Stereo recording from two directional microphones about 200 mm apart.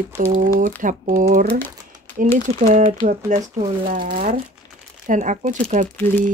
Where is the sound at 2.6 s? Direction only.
40° right (ahead or behind).